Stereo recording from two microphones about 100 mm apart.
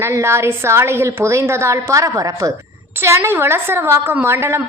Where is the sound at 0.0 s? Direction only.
30° right (ahead or behind).